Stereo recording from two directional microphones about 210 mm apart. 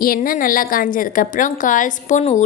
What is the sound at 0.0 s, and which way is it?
A woman's voice, 45° left (ahead or behind).